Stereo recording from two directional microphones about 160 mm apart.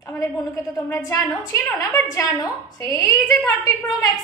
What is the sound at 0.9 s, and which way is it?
A woman's voice, 20° left (ahead or behind).